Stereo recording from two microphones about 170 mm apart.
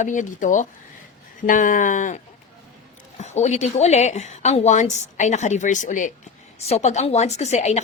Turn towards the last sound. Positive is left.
turn(degrees=40)  # may be behind; listen again after turning